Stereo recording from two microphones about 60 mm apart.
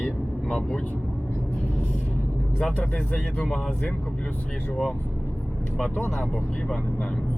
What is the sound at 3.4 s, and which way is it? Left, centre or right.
Speech, centre.